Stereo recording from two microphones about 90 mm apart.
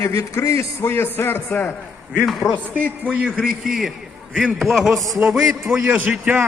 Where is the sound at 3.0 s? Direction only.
10° right (ahead or behind).